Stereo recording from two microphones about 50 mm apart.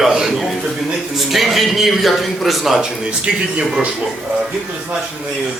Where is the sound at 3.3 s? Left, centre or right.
Centre.